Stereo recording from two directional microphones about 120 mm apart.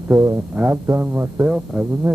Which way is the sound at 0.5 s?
15° right (ahead or behind).